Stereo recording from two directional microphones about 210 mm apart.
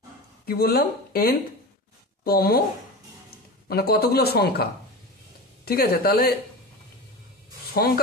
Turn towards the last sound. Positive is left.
turn(degrees=45)  # may be behind; listen again after turning